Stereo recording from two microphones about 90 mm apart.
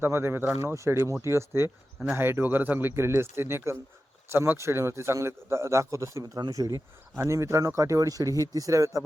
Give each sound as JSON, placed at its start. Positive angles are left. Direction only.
{"t": 0.0, "sound": "a man's voice", "side_deg": -25}
{"t": 6.2, "sound": "a man's voice", "side_deg": -45}